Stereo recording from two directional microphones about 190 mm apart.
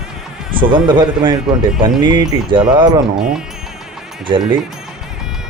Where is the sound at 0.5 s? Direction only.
25° right (ahead or behind).